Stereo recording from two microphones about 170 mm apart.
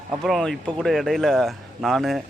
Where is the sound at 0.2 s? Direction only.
Centre (ahead or behind).